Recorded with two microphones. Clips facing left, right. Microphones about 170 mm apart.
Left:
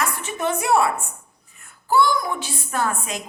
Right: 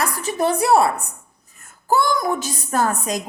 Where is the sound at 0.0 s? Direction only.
35° right (ahead or behind).